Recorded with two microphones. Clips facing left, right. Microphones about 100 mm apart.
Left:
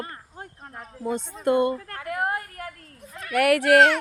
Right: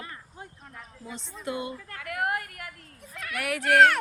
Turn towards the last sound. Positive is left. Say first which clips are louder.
# left 4 dB
turn(degrees=70)  # may be behind; listen again after turning